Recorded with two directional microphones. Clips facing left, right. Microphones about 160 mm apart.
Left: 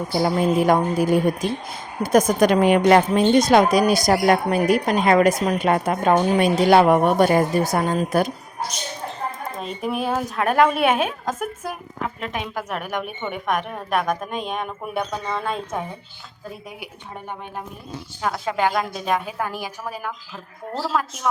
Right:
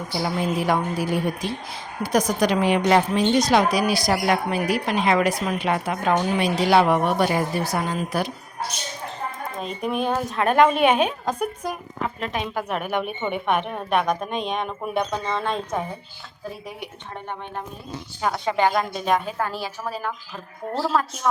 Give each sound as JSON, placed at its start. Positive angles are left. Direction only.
{"t": 0.1, "sound": "a woman's voice", "side_deg": 45}
{"t": 9.6, "sound": "a woman's voice", "side_deg": 0}
{"t": 18.2, "sound": "a woman's voice", "side_deg": 0}
{"t": 19.4, "sound": "a woman's voice", "side_deg": 15}